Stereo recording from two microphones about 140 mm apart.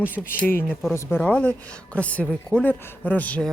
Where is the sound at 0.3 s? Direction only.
15° left (ahead or behind).